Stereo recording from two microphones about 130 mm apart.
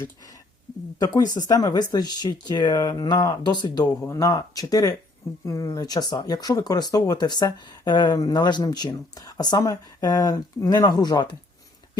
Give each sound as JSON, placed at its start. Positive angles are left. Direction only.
{"t": 0.9, "sound": "speech", "side_deg": 30}